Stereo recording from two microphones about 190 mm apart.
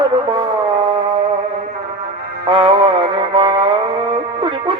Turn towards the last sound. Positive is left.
turn(degrees=-25)  # may be behind; listen again after turning